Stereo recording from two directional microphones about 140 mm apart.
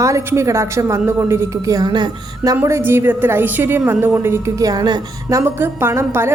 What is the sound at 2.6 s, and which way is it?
A woman's voice, 15° right (ahead or behind).